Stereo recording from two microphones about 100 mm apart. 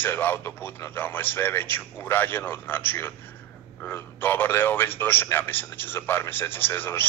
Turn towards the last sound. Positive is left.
turn(degrees=20)  # may be behind; listen again after turning